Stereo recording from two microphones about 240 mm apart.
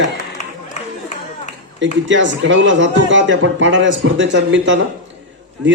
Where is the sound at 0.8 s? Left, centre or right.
Left.